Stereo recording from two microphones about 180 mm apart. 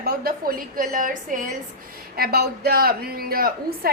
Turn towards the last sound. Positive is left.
turn(degrees=-55)  # may be behind; listen again after turning